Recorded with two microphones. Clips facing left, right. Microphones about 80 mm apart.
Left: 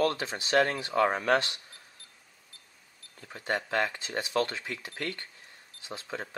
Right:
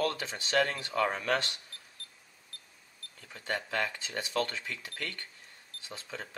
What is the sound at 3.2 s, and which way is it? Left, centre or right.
Speech, left.